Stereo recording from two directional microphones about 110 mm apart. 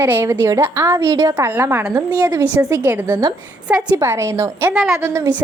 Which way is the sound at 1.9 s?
30° right (ahead or behind).